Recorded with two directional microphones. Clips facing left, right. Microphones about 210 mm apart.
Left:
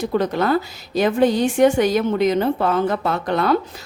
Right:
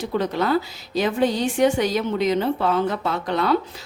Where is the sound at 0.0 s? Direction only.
50° left (ahead or behind).